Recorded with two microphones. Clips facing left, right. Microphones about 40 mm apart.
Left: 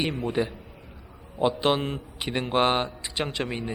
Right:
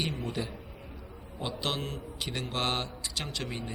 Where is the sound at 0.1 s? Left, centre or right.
Left.